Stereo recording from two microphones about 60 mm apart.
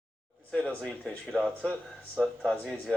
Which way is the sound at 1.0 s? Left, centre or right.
Centre.